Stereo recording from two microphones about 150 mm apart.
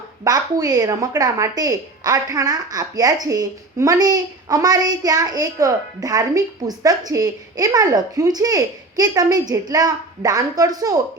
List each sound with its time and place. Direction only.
0.3 s a woman's voice: 25° right (ahead or behind)